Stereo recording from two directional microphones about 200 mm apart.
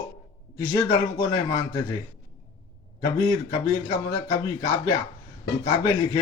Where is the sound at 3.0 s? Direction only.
20° left (ahead or behind).